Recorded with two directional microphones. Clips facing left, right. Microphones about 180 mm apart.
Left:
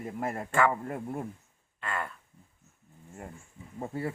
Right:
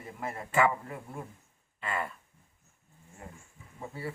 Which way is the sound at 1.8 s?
5° right (ahead or behind).